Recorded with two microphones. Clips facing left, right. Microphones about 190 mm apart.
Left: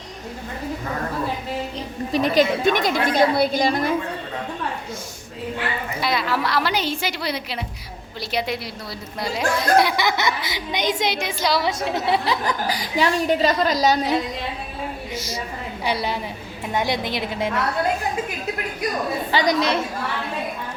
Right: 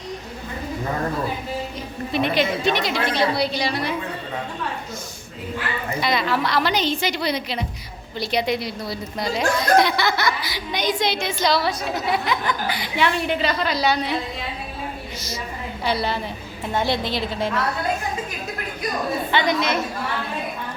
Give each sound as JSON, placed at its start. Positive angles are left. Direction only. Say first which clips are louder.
{"t": 2.1, "sound": "a woman's voice", "louder": "left 3 dB", "side_deg": 40}
{"t": 6.0, "sound": "a woman's voice", "louder": "right 1 dB", "side_deg": 5}
{"t": 11.8, "sound": "a woman's voice", "louder": "left 2 dB", "side_deg": 25}
{"t": 15.8, "sound": "a woman's voice", "louder": "right 1 dB", "side_deg": 15}
{"t": 19.3, "sound": "a woman's voice", "louder": "left 2 dB", "side_deg": 35}